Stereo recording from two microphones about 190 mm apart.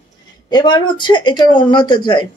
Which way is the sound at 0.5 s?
25° left (ahead or behind).